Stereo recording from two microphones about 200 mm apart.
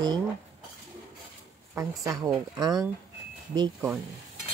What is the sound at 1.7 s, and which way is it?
Speech, 15° right (ahead or behind).